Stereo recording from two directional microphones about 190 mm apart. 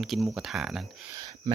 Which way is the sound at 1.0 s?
20° right (ahead or behind).